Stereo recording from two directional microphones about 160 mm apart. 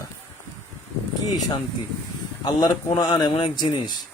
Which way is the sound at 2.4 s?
25° left (ahead or behind).